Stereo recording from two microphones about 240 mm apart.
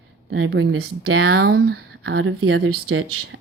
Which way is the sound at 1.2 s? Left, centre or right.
Right.